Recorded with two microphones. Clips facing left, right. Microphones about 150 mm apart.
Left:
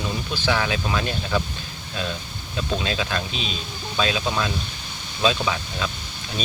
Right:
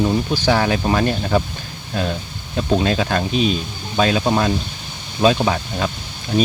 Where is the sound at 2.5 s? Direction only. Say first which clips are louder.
Right 8 dB; 45° right (ahead or behind).